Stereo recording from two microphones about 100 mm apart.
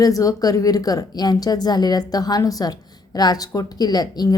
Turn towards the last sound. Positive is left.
turn(degrees=40)  # may be behind; listen again after turning